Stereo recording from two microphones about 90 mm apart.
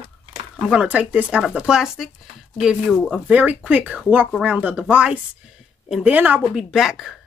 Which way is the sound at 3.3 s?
15° right (ahead or behind).